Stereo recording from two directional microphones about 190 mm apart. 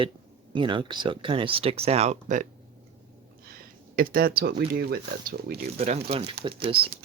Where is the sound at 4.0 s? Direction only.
50° right (ahead or behind).